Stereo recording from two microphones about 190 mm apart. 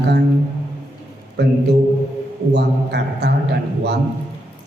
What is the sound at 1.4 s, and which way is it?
Speech, 60° right (ahead or behind).